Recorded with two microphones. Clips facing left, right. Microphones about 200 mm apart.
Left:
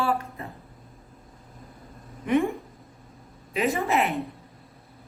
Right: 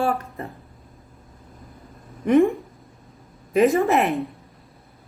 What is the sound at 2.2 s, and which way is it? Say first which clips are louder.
Speech: right 7 dB; 50° right (ahead or behind).